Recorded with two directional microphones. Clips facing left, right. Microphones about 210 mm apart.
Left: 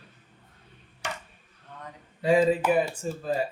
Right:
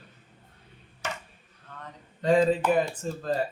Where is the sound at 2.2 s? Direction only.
10° left (ahead or behind).